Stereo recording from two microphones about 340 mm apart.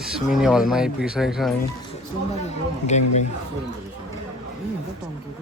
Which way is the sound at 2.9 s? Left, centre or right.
Centre.